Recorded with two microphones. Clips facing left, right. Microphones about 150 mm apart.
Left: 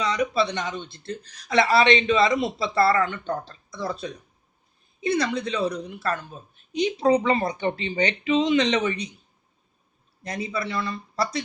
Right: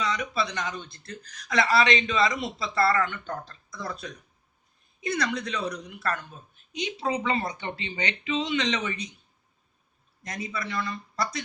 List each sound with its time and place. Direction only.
0.0 s a woman's voice: 35° left (ahead or behind)
10.2 s a woman's voice: 30° left (ahead or behind)